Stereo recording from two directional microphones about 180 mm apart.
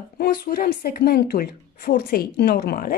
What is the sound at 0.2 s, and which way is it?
A woman's voice, 55° left (ahead or behind).